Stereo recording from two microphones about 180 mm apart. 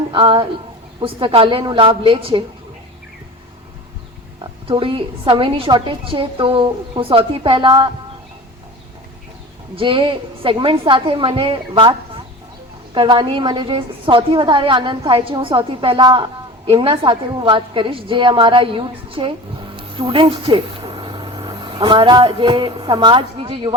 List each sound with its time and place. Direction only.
0.1 s a woman's voice: 30° right (ahead or behind)
4.4 s a woman's voice: 30° right (ahead or behind)
9.7 s a woman's voice: 30° right (ahead or behind)